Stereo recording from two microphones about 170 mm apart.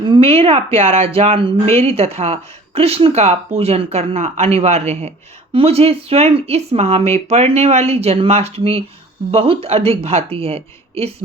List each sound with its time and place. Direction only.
0.0 s speech: 30° right (ahead or behind)